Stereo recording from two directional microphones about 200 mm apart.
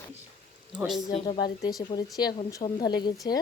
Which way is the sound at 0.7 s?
Centre (ahead or behind).